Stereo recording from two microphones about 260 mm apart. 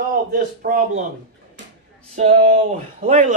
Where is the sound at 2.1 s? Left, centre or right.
Right.